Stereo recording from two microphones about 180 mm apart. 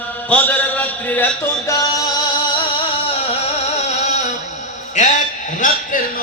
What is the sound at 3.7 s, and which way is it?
Music, 40° left (ahead or behind).